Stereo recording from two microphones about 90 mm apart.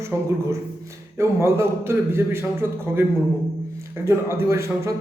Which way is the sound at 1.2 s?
30° right (ahead or behind).